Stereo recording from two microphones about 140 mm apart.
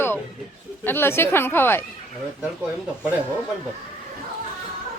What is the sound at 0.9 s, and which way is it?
Speech, 15° left (ahead or behind).